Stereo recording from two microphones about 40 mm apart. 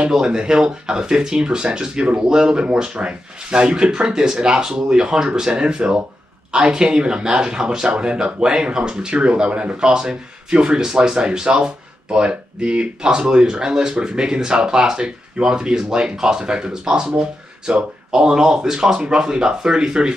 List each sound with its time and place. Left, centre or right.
0.2 s speech: right